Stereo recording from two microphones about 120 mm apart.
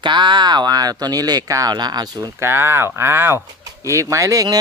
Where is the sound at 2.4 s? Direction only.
20° right (ahead or behind).